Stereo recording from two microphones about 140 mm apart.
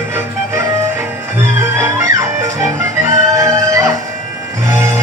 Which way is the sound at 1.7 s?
20° right (ahead or behind).